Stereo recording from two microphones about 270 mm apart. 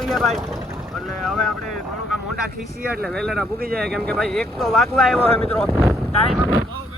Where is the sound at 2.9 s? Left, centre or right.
Centre.